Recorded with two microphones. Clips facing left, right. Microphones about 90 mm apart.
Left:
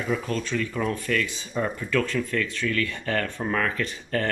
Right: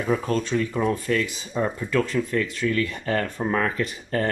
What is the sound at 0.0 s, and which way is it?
Speech, 35° right (ahead or behind).